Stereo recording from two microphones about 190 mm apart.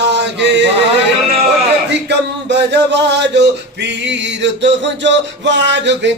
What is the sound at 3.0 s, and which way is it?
Music, 65° right (ahead or behind).